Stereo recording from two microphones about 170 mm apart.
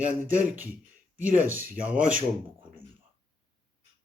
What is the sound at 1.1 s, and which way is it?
Speech, 50° right (ahead or behind).